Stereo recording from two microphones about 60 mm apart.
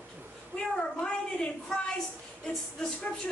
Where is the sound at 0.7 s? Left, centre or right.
Centre.